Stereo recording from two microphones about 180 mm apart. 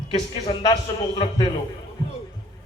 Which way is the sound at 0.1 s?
25° left (ahead or behind).